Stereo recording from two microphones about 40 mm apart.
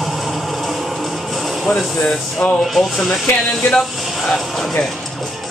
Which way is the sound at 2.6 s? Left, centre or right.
Centre.